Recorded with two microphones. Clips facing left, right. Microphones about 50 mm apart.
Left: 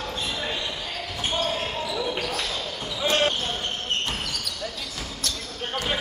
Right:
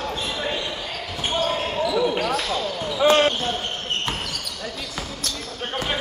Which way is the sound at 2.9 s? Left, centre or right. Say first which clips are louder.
Right 8 dB; right.